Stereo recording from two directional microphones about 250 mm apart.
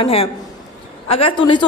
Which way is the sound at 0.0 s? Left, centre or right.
Left.